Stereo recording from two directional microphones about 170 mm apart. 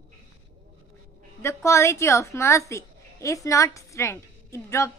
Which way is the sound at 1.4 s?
15° left (ahead or behind).